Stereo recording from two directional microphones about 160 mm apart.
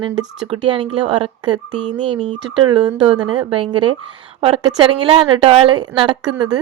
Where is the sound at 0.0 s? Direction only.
35° right (ahead or behind).